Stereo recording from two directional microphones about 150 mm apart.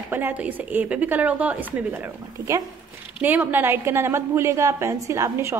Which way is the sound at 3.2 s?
10° right (ahead or behind).